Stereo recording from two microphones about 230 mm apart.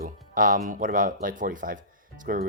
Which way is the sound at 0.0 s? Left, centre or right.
Right.